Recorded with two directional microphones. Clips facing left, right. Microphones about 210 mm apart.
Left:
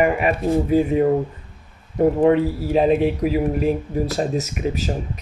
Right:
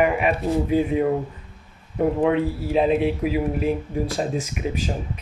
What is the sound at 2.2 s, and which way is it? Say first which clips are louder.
Speech: left 4 dB; 40° left (ahead or behind).